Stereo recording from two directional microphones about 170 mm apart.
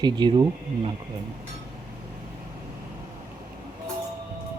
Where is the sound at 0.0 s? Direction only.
25° right (ahead or behind).